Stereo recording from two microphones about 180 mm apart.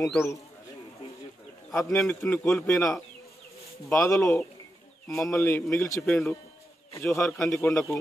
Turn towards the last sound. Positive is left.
turn(degrees=10)  # may be behind; listen again after turning